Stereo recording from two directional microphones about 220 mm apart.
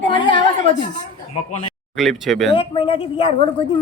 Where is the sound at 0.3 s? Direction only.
20° left (ahead or behind).